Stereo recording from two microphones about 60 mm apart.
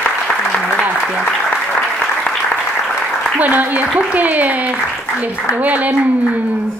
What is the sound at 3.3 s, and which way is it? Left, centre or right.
A woman's voice, right.